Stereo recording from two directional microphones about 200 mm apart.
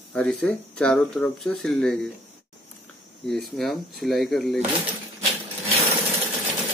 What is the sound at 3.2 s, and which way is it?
Speech, centre (ahead or behind).